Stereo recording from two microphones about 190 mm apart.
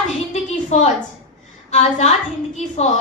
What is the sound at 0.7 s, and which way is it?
A woman's voice, 35° left (ahead or behind).